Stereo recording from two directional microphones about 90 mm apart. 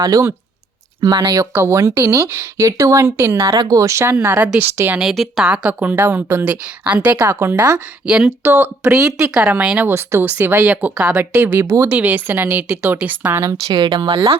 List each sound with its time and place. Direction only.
0.0 s speech: 40° right (ahead or behind)
1.5 s speech: 30° right (ahead or behind)
3.5 s speech: 45° right (ahead or behind); by 4.4 s 25° right (ahead or behind)
4.9 s speech: centre (ahead or behind)
5.5 s speech: 15° right (ahead or behind)
7.3 s speech: 30° right (ahead or behind)
8.0 s speech: 10° right (ahead or behind)
8.4 s speech: 20° right (ahead or behind)
9.9 s speech: 30° right (ahead or behind)
13.3 s speech: 30° right (ahead or behind)
13.7 s speech: 65° right (ahead or behind)